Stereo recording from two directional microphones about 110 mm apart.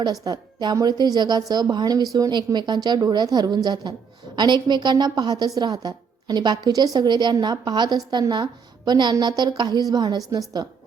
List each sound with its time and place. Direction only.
0.0 s a woman's voice: 40° right (ahead or behind)